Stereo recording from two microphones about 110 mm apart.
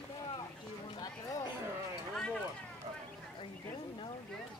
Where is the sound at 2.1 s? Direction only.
5° left (ahead or behind).